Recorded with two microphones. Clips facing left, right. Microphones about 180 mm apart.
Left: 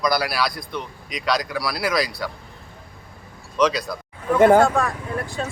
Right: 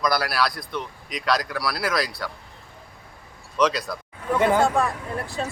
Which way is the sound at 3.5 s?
Centre (ahead or behind).